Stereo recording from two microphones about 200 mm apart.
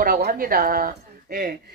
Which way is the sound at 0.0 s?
45° right (ahead or behind).